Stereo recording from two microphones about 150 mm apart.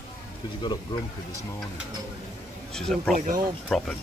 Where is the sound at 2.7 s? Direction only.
5° left (ahead or behind).